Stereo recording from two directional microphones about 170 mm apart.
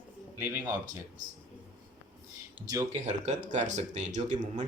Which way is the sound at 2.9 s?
40° right (ahead or behind).